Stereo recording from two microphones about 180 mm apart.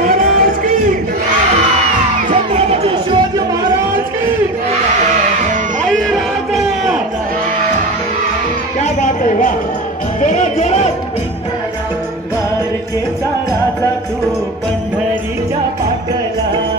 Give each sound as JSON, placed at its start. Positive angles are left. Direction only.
{"t": 0.0, "sound": "a sound", "side_deg": -50}
{"t": 2.2, "sound": "music", "side_deg": -35}
{"t": 6.0, "sound": "crowd", "side_deg": 0}
{"t": 8.7, "sound": "music", "side_deg": 40}